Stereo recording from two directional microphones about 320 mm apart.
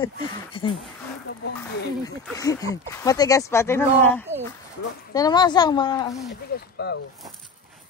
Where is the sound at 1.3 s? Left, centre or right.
Left.